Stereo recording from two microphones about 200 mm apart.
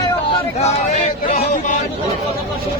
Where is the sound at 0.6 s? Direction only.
30° left (ahead or behind).